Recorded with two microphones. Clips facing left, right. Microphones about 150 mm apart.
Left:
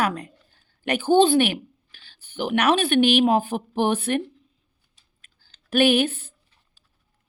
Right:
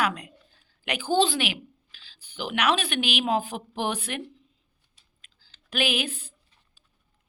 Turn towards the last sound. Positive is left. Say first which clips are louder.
# left 9 dB
turn(degrees=60)  # may be behind; listen again after turning